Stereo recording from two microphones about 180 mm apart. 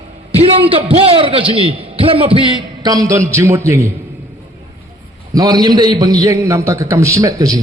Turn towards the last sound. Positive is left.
turn(degrees=-20)  # may be behind; listen again after turning